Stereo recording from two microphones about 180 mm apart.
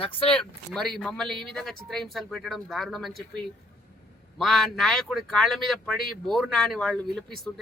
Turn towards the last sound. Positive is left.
turn(degrees=5)  # may be behind; listen again after turning